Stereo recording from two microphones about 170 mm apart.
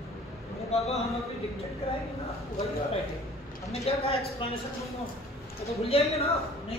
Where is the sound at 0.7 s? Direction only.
40° left (ahead or behind).